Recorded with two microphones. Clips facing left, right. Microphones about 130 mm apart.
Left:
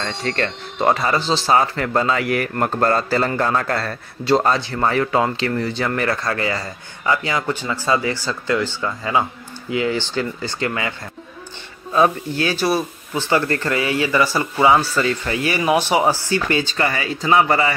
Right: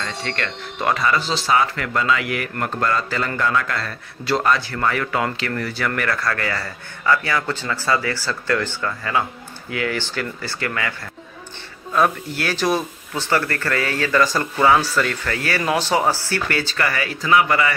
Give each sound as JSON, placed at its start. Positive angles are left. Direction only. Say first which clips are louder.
{"t": 0.0, "sound": "speech", "louder": "left 4 dB", "side_deg": 35}
{"t": 4.2, "sound": "speech", "louder": "left 3 dB", "side_deg": 25}
{"t": 12.4, "sound": "speech", "louder": "even", "side_deg": 10}